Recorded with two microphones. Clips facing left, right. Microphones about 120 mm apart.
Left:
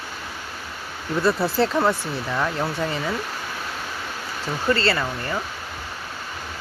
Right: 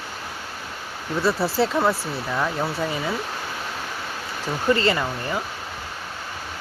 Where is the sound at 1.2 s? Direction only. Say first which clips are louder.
Left 1 dB; centre (ahead or behind).